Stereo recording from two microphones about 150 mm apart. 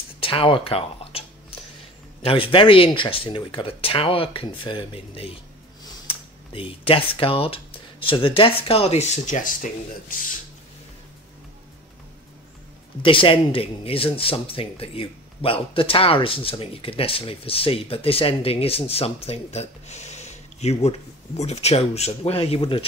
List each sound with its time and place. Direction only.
0.2 s speech: 35° left (ahead or behind)
2.2 s speech: 35° left (ahead or behind); by 10.2 s 65° left (ahead or behind)
13.0 s speech: 35° left (ahead or behind)